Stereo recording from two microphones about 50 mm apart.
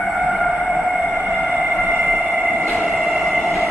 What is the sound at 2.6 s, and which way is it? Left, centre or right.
Train, centre.